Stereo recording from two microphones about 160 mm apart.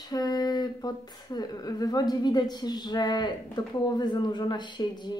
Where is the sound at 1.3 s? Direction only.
25° left (ahead or behind).